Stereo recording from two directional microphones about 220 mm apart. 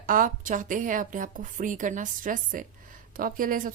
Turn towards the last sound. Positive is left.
turn(degrees=-40)  # may be behind; listen again after turning